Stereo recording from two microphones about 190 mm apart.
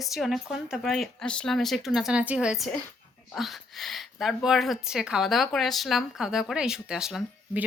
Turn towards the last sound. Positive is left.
turn(degrees=-5)  # may be behind; listen again after turning